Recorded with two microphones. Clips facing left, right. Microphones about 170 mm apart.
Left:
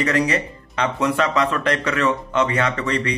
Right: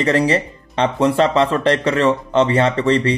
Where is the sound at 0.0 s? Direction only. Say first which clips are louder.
Right 4 dB; 30° right (ahead or behind).